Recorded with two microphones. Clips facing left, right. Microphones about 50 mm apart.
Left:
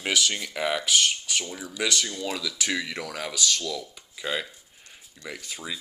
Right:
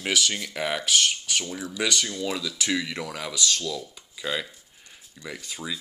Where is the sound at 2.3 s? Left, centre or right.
Centre.